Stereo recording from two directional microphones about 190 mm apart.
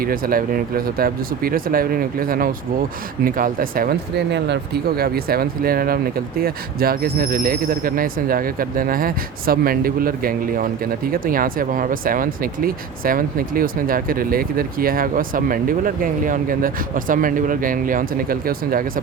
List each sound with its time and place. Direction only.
0.0 s speech: 50° right (ahead or behind)